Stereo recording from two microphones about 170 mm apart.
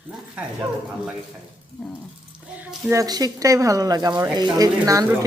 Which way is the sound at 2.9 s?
20° right (ahead or behind).